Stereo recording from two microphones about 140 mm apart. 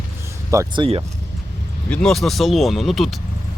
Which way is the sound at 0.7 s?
35° right (ahead or behind).